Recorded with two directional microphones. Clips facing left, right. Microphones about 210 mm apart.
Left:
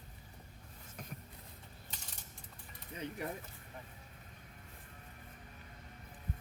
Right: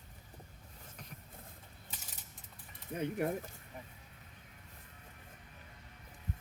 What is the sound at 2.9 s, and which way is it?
Speech, 55° right (ahead or behind).